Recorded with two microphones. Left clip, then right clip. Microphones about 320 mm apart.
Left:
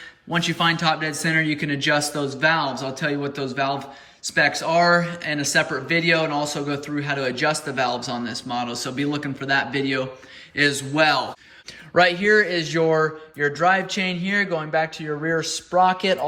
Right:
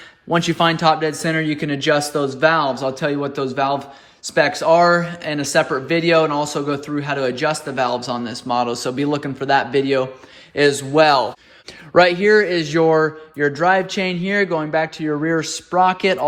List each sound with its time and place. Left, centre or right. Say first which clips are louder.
0.3 s speech: right 4 dB; centre